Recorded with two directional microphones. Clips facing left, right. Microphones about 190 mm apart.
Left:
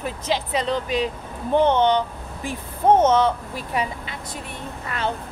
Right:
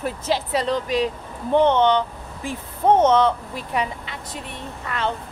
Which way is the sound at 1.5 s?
10° left (ahead or behind).